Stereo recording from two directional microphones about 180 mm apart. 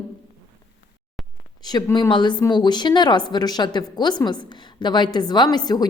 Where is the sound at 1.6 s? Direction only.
20° left (ahead or behind).